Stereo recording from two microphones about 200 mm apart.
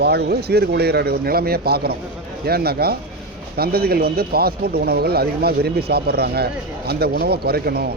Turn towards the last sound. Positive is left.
turn(degrees=-50)  # may be behind; listen again after turning